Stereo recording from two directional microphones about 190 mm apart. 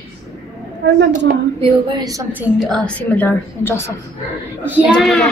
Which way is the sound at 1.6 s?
20° right (ahead or behind).